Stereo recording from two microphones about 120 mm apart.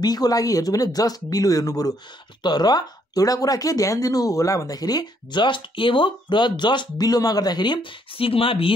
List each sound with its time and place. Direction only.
0.0 s speech: 35° left (ahead or behind); by 8.7 s 50° left (ahead or behind)